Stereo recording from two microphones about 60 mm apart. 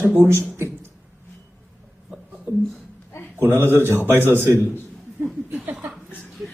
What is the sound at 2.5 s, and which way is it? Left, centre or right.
Speech, right.